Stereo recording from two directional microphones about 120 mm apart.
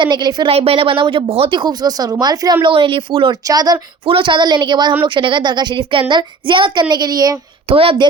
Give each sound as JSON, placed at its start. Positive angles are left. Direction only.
{"t": 0.0, "sound": "a woman's voice", "side_deg": -40}
{"t": 0.4, "sound": "speech", "side_deg": -50}
{"t": 2.6, "sound": "speech", "side_deg": -45}
{"t": 3.4, "sound": "a woman's voice", "side_deg": -30}
{"t": 4.0, "sound": "a woman's voice", "side_deg": -45}
{"t": 7.7, "sound": "speech", "side_deg": -50}